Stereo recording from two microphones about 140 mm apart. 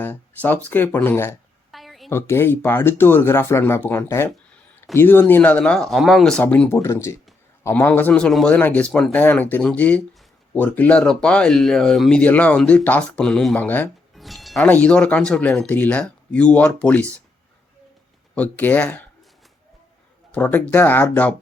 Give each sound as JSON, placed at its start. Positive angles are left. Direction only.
{"t": 0.0, "sound": "speech", "side_deg": 15}
{"t": 1.7, "sound": "a sound", "side_deg": 0}
{"t": 2.0, "sound": "speech", "side_deg": 15}
{"t": 14.2, "sound": "music", "side_deg": 0}
{"t": 14.7, "sound": "speech", "side_deg": 10}
{"t": 18.3, "sound": "speech", "side_deg": 10}
{"t": 20.3, "sound": "speech", "side_deg": 10}